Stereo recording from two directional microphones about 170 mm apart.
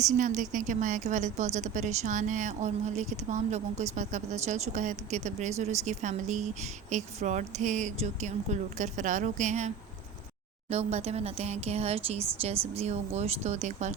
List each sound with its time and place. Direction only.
0.0 s speech: 45° right (ahead or behind)